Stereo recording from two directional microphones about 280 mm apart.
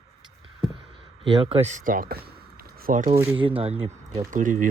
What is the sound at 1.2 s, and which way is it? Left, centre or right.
Speech, centre.